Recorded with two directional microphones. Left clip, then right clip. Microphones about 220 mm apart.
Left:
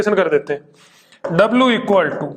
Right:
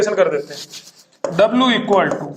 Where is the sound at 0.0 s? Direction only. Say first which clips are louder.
Left 1 dB; 50° left (ahead or behind).